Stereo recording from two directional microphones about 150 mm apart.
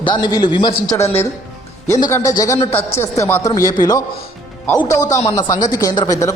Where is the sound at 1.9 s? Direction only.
20° left (ahead or behind).